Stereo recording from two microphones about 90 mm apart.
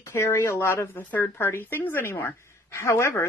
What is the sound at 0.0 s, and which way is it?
A woman's voice, 30° left (ahead or behind).